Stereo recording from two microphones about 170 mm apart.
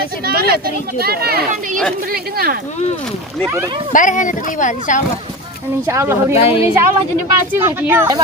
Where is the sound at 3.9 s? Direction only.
50° left (ahead or behind).